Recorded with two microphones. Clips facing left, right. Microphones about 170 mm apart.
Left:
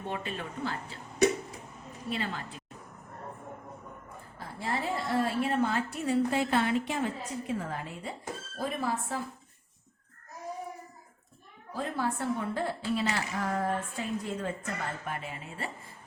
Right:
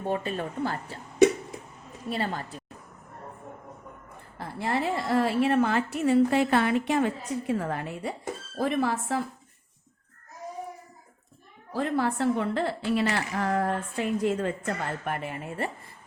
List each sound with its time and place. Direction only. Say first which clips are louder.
0.1 s speech: right 8 dB; 40° right (ahead or behind)
2.0 s a woman's voice: right 4 dB; 40° right (ahead or behind)
4.6 s a woman's voice: right 5 dB; 75° right (ahead or behind)
8.5 s speech: right 6 dB; 80° right
11.7 s a woman's voice: right 6 dB; 70° right (ahead or behind)